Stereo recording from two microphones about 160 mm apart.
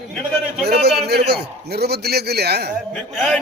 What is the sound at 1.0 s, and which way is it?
A man's voice, 90° right.